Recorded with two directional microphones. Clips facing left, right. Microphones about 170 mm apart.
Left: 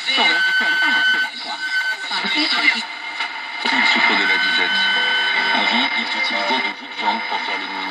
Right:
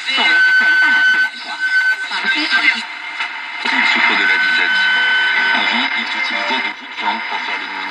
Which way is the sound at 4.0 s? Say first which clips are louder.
Right 1 dB; 35° left (ahead or behind).